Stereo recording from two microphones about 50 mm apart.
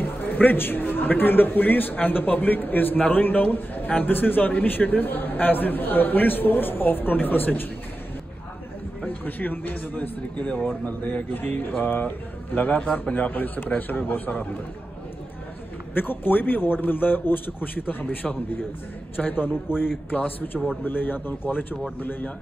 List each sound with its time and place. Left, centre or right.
0.0 s a man's voice: left
9.0 s a man's voice: left
15.9 s a man's voice: left
19.4 s speech: centre
20.1 s a man's voice: left